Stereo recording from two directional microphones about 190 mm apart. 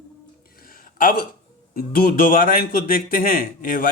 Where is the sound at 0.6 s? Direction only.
50° left (ahead or behind).